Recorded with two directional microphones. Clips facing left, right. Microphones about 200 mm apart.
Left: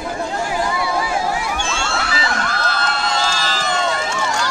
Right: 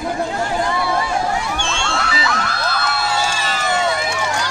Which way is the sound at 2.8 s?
10° right (ahead or behind).